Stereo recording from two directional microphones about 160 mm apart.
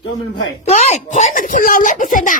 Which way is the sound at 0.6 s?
45° left (ahead or behind).